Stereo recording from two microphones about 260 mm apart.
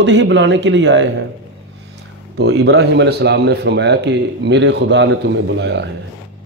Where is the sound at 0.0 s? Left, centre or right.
Right.